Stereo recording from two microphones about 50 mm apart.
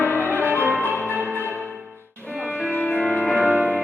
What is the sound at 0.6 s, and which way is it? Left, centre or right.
Music, right.